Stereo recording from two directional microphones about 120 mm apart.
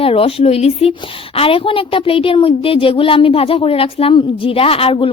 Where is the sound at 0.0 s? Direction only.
50° left (ahead or behind).